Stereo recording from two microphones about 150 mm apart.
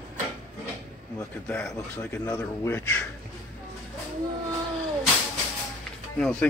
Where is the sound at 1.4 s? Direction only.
10° left (ahead or behind).